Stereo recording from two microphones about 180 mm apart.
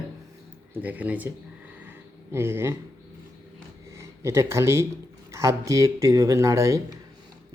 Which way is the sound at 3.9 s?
15° right (ahead or behind).